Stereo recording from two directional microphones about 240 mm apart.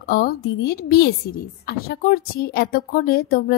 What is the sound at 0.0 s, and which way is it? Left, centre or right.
A woman's voice, left.